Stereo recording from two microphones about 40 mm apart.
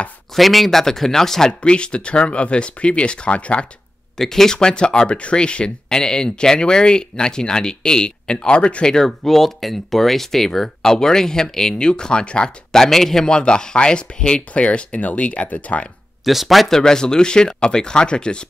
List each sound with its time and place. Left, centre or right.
0.3 s speech: centre
1.5 s speech: left
4.2 s speech: centre; by 8.8 s left
8.8 s speech: centre
11.8 s speech: left
12.7 s speech: centre
13.3 s speech: left
16.3 s a man's voice: centre
16.7 s speech: centre